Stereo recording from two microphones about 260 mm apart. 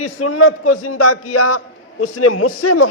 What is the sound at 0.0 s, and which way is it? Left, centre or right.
A man's voice, left.